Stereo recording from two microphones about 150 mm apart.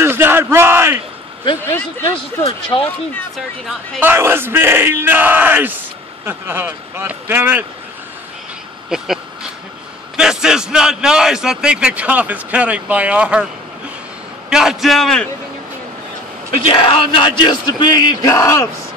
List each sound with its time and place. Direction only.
0.0 s bellow: 15° right (ahead or behind)
1.7 s speech: 15° left (ahead or behind)
2.0 s speech: 35° left (ahead or behind)
3.3 s a man's voice: centre (ahead or behind)
4.0 s speech: 15° right (ahead or behind)
8.9 s a sound: 5° right (ahead or behind)
10.1 s a man's voice: 5° right (ahead or behind)
14.5 s a man's voice: 5° right (ahead or behind)
16.6 s speech: 35° left (ahead or behind); by 18.7 s 20° left (ahead or behind)